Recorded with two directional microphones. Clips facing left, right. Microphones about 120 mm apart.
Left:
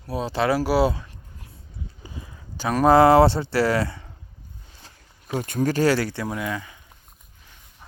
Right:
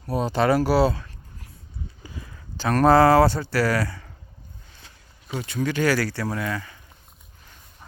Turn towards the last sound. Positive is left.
turn(degrees=15)  # may be behind; listen again after turning